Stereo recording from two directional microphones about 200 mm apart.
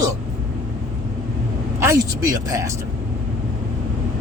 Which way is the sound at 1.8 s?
15° right (ahead or behind).